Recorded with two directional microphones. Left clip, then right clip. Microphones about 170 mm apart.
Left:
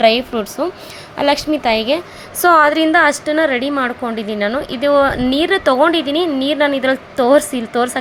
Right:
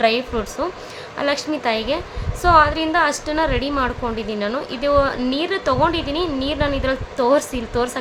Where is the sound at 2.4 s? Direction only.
50° left (ahead or behind).